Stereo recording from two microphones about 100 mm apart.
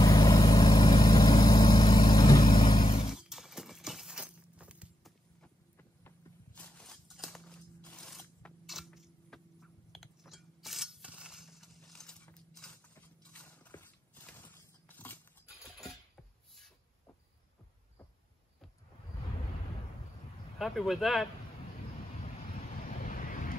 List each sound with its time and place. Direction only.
0.0 s vehicle: 40° left (ahead or behind)
2.5 s vehicle: 50° left (ahead or behind)
3.1 s horse: 5° right (ahead or behind)
5.8 s a sound: 20° left (ahead or behind)
7.1 s a sound: centre (ahead or behind)
8.6 s a sound: centre (ahead or behind)
12.5 s mechanisms: 10° left (ahead or behind)
12.9 s horse: 15° left (ahead or behind)
20.5 s speech: centre (ahead or behind)